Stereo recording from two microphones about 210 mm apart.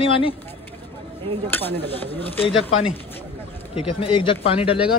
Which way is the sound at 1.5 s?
10° left (ahead or behind).